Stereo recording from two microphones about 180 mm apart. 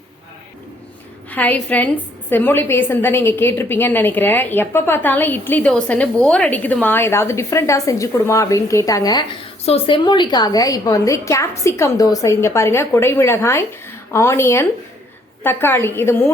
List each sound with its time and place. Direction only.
1.3 s a woman's voice: 10° left (ahead or behind)
9.6 s a woman's voice: 30° left (ahead or behind); by 16.1 s 15° left (ahead or behind)